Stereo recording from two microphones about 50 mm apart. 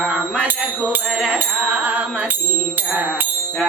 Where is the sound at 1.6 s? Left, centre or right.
Right.